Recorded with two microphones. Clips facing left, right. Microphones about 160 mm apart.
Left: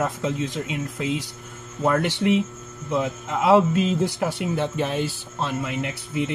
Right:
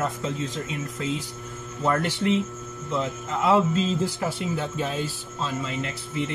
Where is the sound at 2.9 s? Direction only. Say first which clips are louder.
Left 3 dB; 65° left (ahead or behind).